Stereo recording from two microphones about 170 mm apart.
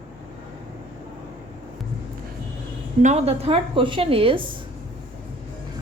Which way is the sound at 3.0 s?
40° right (ahead or behind).